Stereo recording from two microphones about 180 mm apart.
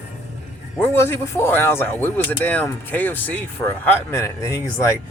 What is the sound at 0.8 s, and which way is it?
Speech, 15° left (ahead or behind).